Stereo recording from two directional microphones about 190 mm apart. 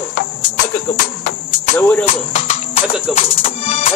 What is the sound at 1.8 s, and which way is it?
Cricket, 10° left (ahead or behind).